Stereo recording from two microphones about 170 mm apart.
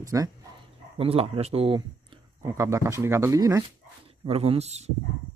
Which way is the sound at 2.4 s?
15° right (ahead or behind).